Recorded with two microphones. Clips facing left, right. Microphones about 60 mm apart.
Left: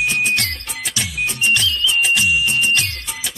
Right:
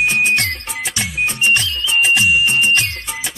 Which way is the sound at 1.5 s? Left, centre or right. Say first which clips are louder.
Right 1 dB; right.